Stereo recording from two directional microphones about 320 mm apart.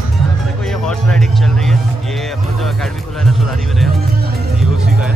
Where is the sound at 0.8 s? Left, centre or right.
Centre.